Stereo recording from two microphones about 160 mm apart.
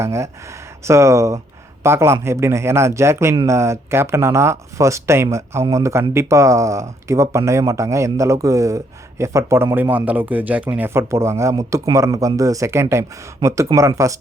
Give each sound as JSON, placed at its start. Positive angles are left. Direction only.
{"t": 0.0, "sound": "speech", "side_deg": -15}